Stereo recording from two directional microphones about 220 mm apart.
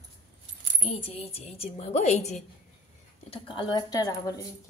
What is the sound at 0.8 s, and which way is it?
A woman's voice, 25° left (ahead or behind).